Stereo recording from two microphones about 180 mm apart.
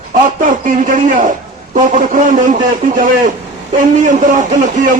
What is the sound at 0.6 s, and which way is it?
A man's voice, 45° right (ahead or behind).